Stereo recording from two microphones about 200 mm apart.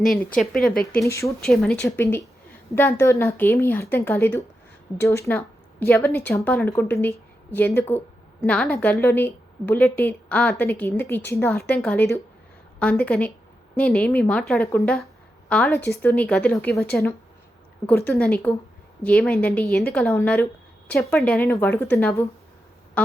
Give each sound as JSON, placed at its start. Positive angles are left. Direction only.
{"t": 0.3, "sound": "a woman's voice", "side_deg": 0}
{"t": 0.9, "sound": "speech", "side_deg": 15}
{"t": 1.4, "sound": "a woman's voice", "side_deg": 5}
{"t": 23.0, "sound": "quack", "side_deg": 5}